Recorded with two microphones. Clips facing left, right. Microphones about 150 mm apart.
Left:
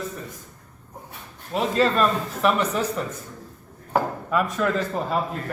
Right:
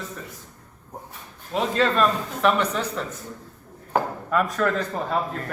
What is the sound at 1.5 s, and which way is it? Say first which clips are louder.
A man's voice: left 1 dB; centre (ahead or behind).